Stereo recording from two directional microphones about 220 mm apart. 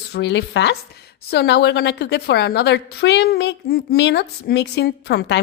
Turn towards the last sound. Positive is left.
turn(degrees=50)  # may be behind; listen again after turning